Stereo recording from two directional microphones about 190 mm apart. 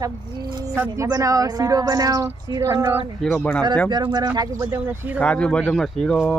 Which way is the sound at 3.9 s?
25° right (ahead or behind).